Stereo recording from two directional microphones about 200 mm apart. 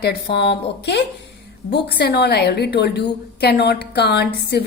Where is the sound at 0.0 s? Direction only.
55° left (ahead or behind).